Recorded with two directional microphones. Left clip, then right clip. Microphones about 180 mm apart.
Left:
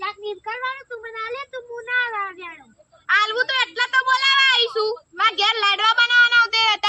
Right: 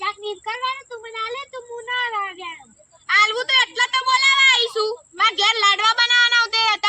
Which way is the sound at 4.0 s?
30° left (ahead or behind).